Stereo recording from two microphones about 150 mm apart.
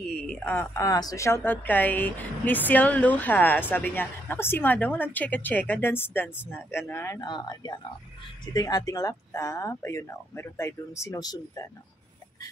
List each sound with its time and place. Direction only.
0.2 s speech: 5° left (ahead or behind)
0.7 s a woman's voice: 25° left (ahead or behind)